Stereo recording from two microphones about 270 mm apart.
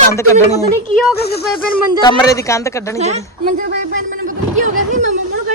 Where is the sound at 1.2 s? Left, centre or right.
Left.